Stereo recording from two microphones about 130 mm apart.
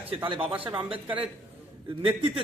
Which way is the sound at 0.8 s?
45° right (ahead or behind).